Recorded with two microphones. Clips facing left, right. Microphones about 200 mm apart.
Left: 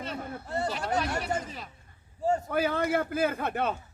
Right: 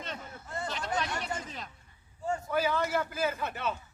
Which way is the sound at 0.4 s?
35° left (ahead or behind).